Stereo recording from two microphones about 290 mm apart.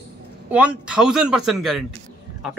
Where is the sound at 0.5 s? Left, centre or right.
Centre.